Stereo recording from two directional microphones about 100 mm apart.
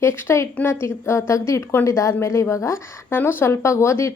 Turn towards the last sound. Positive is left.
turn(degrees=30)  # may be behind; listen again after turning